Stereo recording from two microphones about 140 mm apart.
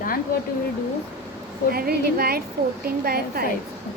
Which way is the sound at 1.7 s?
90° right.